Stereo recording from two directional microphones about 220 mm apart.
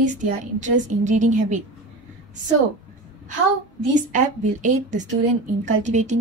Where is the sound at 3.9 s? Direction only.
35° right (ahead or behind).